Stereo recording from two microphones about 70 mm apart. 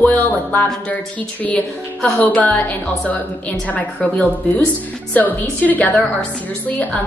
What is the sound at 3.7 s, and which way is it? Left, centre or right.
Speech, left.